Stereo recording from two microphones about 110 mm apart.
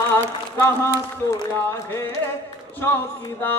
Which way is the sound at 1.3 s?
25° left (ahead or behind).